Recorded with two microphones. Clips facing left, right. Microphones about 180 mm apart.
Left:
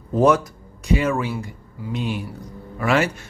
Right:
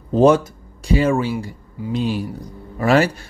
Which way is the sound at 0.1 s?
25° right (ahead or behind).